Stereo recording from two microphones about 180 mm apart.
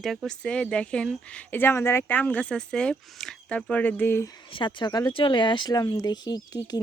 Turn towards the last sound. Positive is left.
turn(degrees=20)  # may be behind; listen again after turning